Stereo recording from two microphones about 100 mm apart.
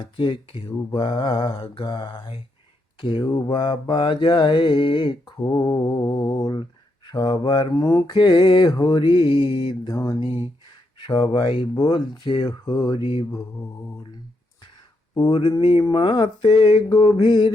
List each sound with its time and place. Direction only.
0.0 s speech: 55° left (ahead or behind)
0.9 s mantra: 45° left (ahead or behind)
5.4 s mantra: 40° left (ahead or behind)
7.8 s a sound: 35° left (ahead or behind)
8.0 s mantra: 50° left (ahead or behind)
11.0 s mantra: 50° left (ahead or behind)
15.1 s a sound: 60° left (ahead or behind)
15.5 s speech: 55° left (ahead or behind)
15.8 s mantra: 50° left (ahead or behind)